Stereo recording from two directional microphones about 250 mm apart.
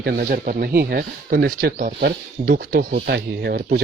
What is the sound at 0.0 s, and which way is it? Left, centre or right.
Speech, right.